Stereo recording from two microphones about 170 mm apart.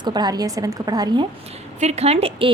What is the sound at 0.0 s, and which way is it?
A woman's voice, 25° right (ahead or behind).